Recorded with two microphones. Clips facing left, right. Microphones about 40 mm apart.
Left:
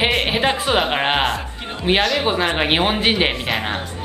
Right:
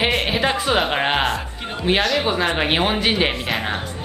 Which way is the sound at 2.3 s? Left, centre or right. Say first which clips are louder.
Left 1 dB; centre.